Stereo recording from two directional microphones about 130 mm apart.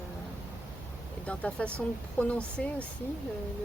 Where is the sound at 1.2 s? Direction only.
10° left (ahead or behind).